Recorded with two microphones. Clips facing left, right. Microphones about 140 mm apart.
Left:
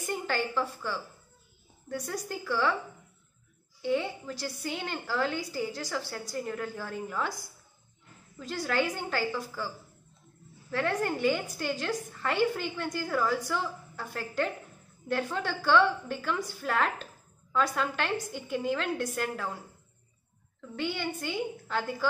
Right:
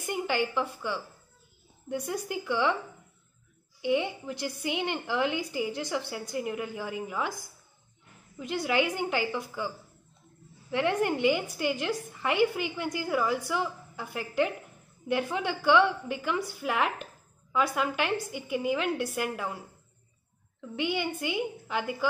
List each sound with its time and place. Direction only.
0.0 s a woman's voice: 15° right (ahead or behind)
3.8 s a woman's voice: 15° right (ahead or behind)
8.4 s a woman's voice: 15° right (ahead or behind)
10.7 s a woman's voice: 15° right (ahead or behind)
20.7 s a woman's voice: 15° right (ahead or behind)